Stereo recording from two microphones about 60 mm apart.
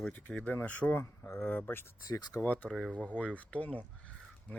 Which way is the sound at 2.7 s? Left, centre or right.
Centre.